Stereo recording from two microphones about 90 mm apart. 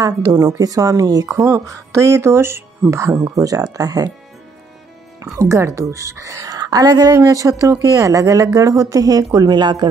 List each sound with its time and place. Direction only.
0.0 s a woman's voice: 40° right (ahead or behind)
3.3 s speech: 40° right (ahead or behind)
5.2 s a woman's voice: 35° right (ahead or behind); by 9.8 s 55° right (ahead or behind)